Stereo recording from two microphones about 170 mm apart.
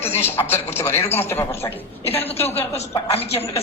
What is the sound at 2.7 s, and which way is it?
Speech, 40° left (ahead or behind).